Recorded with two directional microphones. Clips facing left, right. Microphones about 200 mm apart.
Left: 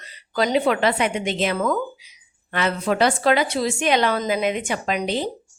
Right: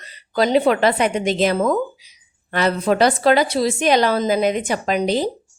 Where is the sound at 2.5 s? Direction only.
40° right (ahead or behind).